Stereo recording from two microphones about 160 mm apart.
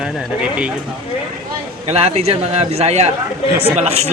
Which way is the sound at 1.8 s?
40° right (ahead or behind).